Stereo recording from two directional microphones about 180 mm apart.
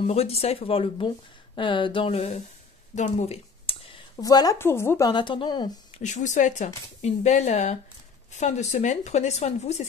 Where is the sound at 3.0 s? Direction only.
40° left (ahead or behind).